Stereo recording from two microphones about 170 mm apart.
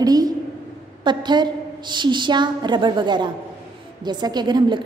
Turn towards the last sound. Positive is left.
turn(degrees=-25)  # may be behind; listen again after turning